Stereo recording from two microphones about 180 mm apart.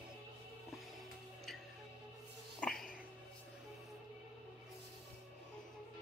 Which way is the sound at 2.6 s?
5° left (ahead or behind).